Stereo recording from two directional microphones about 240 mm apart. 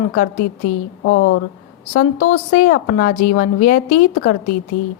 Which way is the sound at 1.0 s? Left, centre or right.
Left.